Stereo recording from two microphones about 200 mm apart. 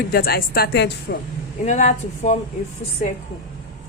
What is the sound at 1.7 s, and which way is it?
Speech, 35° left (ahead or behind).